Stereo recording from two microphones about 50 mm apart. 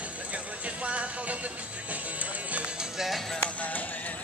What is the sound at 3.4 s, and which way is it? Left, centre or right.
Clip-clop, left.